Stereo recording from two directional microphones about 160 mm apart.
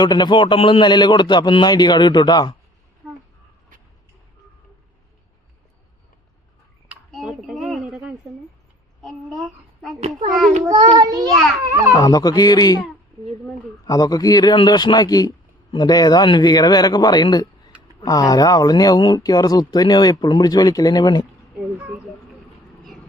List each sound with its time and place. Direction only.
0.0 s speech: 25° left (ahead or behind)
6.8 s a sound: centre (ahead or behind)
9.0 s child singing: centre (ahead or behind)
10.9 s a child's voice: 25° right (ahead or behind)
11.9 s speech: 25° left (ahead or behind)
13.8 s speech: 25° left (ahead or behind)
21.8 s speech: 5° right (ahead or behind)